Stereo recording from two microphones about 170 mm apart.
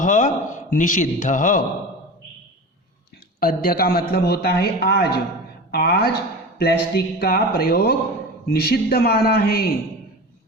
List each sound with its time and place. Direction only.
0.0 s a man's voice: 45° left (ahead or behind)
3.4 s a man's voice: 60° left (ahead or behind)